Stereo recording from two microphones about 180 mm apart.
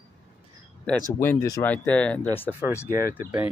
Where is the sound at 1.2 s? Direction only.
15° left (ahead or behind).